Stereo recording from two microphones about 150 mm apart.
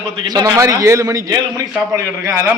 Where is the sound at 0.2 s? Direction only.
30° right (ahead or behind).